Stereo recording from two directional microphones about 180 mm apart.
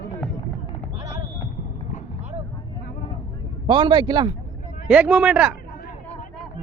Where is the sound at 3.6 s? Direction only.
25° right (ahead or behind).